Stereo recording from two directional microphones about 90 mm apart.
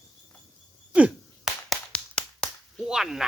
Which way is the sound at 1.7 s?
10° left (ahead or behind).